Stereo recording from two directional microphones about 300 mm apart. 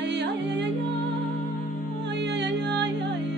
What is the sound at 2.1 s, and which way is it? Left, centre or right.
Music, right.